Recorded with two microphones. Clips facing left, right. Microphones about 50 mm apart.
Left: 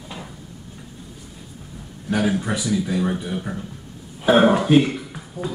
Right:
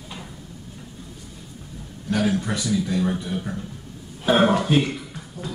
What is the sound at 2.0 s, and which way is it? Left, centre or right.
A man's voice, centre.